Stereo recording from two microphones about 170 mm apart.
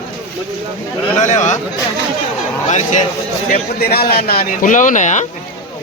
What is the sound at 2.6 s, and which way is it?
Speech, 45° left (ahead or behind).